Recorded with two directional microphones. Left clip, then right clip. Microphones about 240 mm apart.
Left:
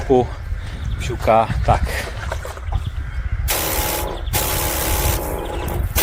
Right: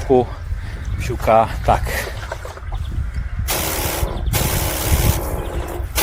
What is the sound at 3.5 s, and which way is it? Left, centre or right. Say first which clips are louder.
Spray: left 1 dB; centre.